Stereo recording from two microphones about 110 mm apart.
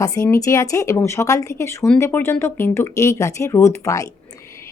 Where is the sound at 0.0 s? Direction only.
30° left (ahead or behind).